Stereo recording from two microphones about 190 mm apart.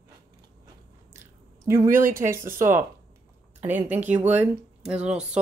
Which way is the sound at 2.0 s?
45° right (ahead or behind).